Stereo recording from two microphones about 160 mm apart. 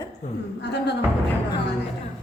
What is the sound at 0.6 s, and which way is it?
Speech, 90° left.